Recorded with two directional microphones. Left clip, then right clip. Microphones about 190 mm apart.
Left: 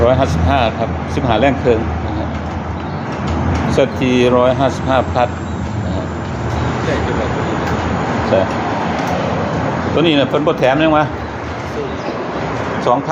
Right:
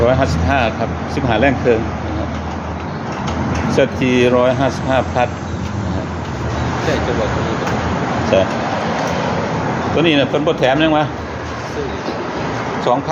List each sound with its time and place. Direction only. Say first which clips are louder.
0.0 s speech: left 1 dB; centre (ahead or behind)
3.7 s speech: even; centre (ahead or behind)
8.3 s speech: right 1 dB; 5° right (ahead or behind)
10.0 s speech: left 1 dB; 5° left (ahead or behind)